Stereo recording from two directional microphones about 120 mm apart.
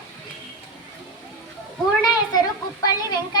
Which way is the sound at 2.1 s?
35° left (ahead or behind).